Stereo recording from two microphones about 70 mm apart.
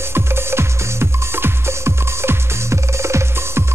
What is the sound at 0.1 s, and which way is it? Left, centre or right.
Music, right.